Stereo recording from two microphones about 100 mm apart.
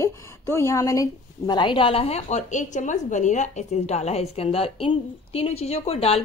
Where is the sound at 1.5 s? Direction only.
50° left (ahead or behind); by 2.2 s 75° left (ahead or behind).